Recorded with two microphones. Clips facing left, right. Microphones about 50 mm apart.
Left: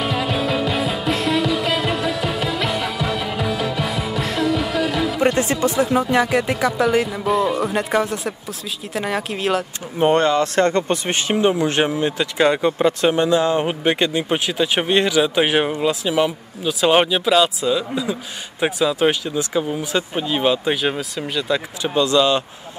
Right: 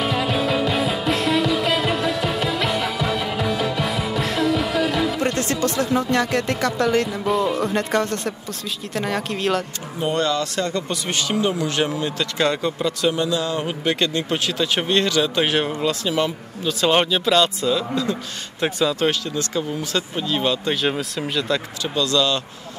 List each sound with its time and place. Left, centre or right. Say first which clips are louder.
0.0 s music: even; centre
5.2 s a man's voice: left 4 dB; centre
9.9 s speech: left 6 dB; left; by 12.7 s centre
12.7 s a man's voice: left 4 dB; left; by 21.5 s centre
21.8 s speech: left 4 dB; left